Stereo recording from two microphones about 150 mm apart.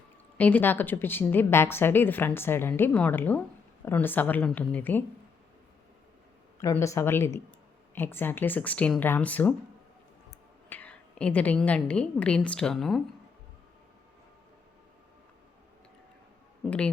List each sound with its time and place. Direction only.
0.3 s a woman's voice: 10° left (ahead or behind)
6.6 s a woman's voice: 20° left (ahead or behind)
10.7 s a woman's voice: 10° left (ahead or behind)
16.6 s a woman's voice: 10° left (ahead or behind)